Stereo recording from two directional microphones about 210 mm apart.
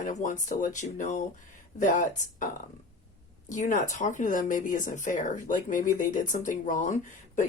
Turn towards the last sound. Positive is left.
turn(degrees=35)  # may be behind; listen again after turning